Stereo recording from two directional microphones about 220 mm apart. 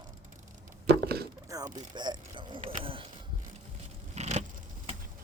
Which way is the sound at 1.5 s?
15° right (ahead or behind).